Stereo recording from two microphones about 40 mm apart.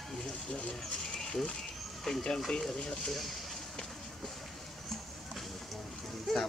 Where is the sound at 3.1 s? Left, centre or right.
Centre.